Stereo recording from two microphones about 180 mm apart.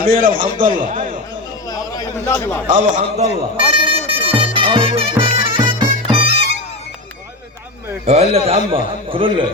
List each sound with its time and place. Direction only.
0.0 s a man's voice: 50° right (ahead or behind)
1.7 s a sound: 20° left (ahead or behind)
2.9 s music: 35° right (ahead or behind)
8.0 s a man's voice: 35° right (ahead or behind)